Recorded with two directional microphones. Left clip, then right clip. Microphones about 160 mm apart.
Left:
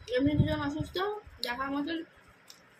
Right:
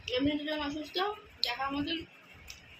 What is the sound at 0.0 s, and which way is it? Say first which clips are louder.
A woman's voice: left 2 dB; 15° left (ahead or behind).